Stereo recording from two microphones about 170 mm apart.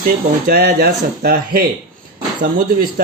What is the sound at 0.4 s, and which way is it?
Speech, 55° right (ahead or behind).